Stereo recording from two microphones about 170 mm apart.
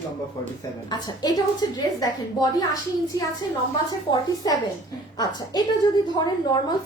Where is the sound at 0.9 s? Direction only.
25° left (ahead or behind).